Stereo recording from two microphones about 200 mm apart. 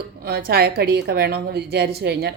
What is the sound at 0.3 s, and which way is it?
A woman's voice, 50° right (ahead or behind).